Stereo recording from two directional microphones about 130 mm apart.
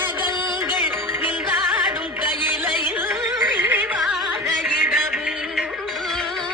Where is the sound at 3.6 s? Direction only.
15° right (ahead or behind).